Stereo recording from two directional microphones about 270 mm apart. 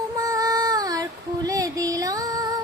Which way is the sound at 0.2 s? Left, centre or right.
Centre.